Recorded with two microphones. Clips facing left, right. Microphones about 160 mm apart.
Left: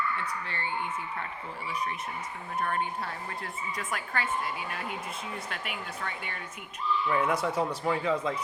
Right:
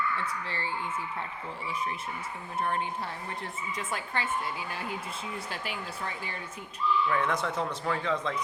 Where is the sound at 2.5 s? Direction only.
25° right (ahead or behind).